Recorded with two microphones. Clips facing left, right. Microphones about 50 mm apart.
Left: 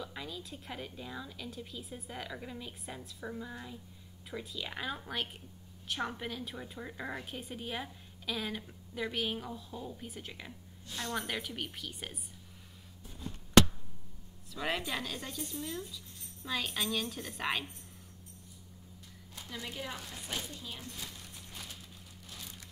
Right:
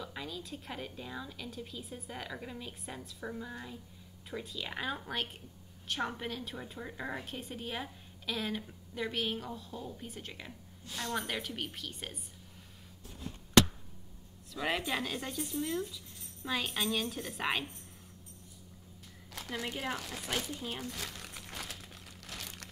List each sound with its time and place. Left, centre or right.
0.0 s a woman's voice: centre
14.5 s speech: centre
19.3 s a sound: right
19.6 s speech: right
20.0 s speech: right
20.8 s crumpling: right